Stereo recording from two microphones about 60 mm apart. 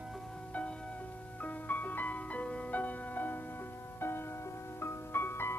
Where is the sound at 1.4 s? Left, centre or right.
Left.